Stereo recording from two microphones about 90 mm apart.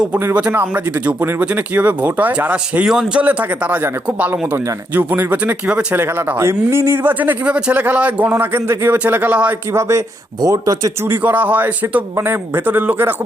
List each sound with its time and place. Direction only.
0.3 s speech: 20° right (ahead or behind)
2.9 s a man's voice: 5° right (ahead or behind)
3.2 s speech: 15° right (ahead or behind)
10.4 s speech: 40° right (ahead or behind)
11.0 s speech: 20° right (ahead or behind)